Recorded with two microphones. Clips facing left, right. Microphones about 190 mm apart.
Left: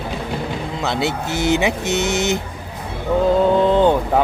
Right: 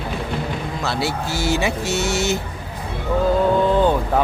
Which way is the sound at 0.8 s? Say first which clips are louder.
Left 3 dB; 20° left (ahead or behind).